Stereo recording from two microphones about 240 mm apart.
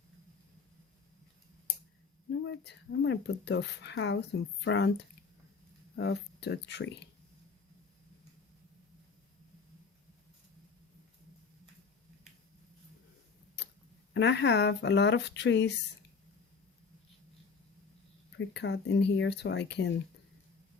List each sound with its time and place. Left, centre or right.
2.5 s speech: left
14.1 s speech: left
18.3 s speech: left